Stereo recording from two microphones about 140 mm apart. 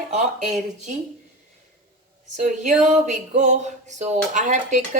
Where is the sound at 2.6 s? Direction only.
60° right (ahead or behind).